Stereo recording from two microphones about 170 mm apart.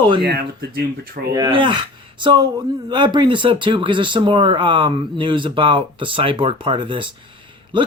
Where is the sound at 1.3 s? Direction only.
25° right (ahead or behind).